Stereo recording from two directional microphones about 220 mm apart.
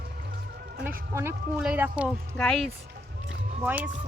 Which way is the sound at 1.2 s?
10° right (ahead or behind).